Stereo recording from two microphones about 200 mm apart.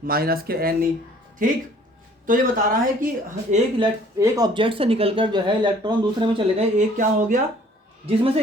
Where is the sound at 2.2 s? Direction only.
40° right (ahead or behind).